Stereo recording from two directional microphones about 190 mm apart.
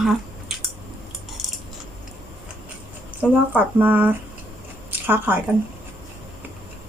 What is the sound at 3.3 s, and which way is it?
Speech, 10° right (ahead or behind).